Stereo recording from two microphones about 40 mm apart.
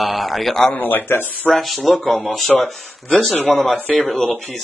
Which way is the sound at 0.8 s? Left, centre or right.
Left.